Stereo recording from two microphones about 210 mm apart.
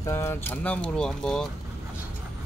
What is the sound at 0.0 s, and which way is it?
Speech, 10° left (ahead or behind).